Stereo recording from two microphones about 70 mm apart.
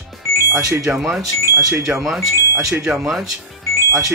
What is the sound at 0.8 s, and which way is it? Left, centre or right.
Speech, centre.